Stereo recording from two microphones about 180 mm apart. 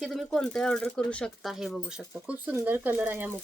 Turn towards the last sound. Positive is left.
turn(degrees=-10)  # may be behind; listen again after turning